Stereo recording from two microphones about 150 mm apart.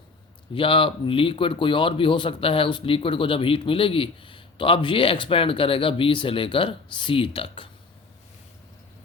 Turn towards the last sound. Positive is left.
turn(degrees=35)  # may be behind; listen again after turning